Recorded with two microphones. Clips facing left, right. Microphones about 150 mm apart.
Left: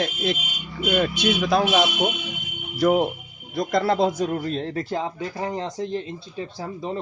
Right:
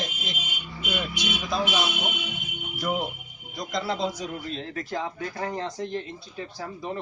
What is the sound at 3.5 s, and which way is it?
A man's voice, 55° left (ahead or behind).